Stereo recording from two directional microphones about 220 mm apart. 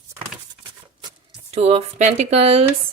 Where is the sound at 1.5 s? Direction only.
30° right (ahead or behind).